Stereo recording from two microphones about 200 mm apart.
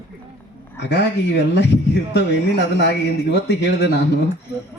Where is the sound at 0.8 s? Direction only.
60° left (ahead or behind).